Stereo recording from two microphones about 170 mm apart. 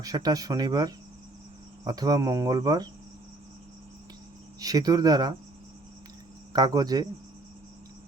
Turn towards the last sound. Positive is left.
turn(degrees=-20)  # may be behind; listen again after turning